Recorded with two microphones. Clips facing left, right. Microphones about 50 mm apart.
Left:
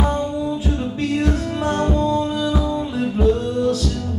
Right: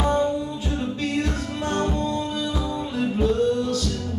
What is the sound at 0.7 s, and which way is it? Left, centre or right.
Music, centre.